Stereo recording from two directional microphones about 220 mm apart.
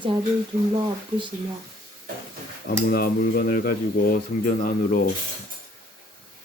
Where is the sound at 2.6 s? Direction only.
40° left (ahead or behind).